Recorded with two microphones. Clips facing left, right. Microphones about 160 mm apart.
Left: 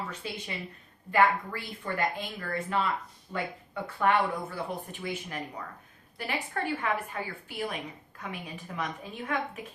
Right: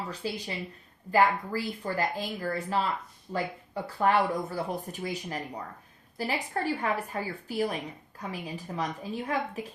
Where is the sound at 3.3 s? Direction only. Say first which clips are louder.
Right 3 dB; 35° right (ahead or behind).